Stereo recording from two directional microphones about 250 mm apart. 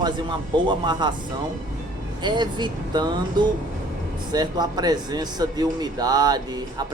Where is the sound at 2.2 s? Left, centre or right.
Centre.